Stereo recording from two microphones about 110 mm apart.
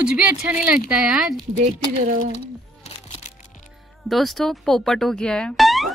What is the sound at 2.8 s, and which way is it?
Music, 75° left (ahead or behind).